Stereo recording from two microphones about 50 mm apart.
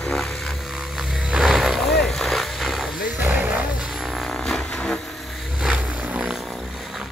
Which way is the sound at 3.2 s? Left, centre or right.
Right.